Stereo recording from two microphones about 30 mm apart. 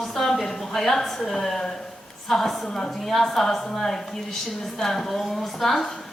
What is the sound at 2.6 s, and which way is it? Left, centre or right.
Speech, left.